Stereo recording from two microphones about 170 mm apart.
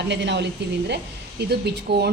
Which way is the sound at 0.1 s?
90° right.